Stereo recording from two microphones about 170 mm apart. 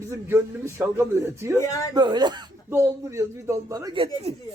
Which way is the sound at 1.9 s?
25° right (ahead or behind).